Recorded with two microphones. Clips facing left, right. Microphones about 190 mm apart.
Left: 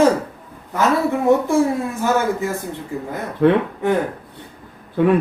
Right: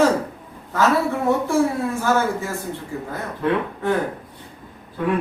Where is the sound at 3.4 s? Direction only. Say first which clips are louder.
Left 7 dB; 70° left (ahead or behind).